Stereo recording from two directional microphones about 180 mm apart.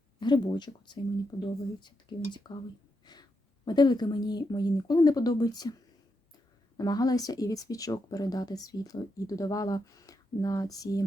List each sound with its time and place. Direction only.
0.2 s speech: 25° left (ahead or behind)
3.1 s a sound: 20° left (ahead or behind)
3.7 s speech: 25° left (ahead or behind)
6.7 s speech: 20° left (ahead or behind)